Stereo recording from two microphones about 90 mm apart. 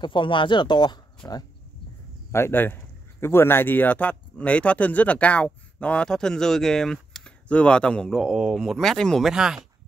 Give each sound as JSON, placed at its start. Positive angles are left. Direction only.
{"t": 0.0, "sound": "speech", "side_deg": 65}
{"t": 2.3, "sound": "speech", "side_deg": 25}
{"t": 9.2, "sound": "speech", "side_deg": -5}